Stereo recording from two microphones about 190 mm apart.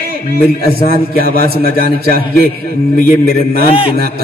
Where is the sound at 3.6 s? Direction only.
30° left (ahead or behind).